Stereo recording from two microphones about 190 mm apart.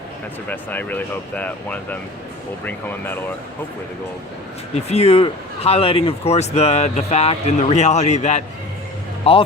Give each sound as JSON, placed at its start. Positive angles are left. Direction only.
{"t": 0.5, "sound": "speech", "side_deg": 10}
{"t": 4.9, "sound": "speech", "side_deg": 35}